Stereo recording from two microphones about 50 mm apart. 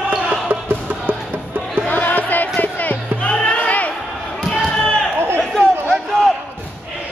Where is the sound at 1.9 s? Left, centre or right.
Left.